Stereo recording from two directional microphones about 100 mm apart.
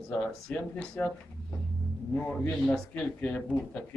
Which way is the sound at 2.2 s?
15° left (ahead or behind).